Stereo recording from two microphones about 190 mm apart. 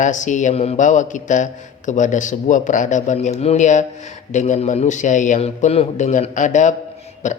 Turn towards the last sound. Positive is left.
turn(degrees=40)  # may be behind; listen again after turning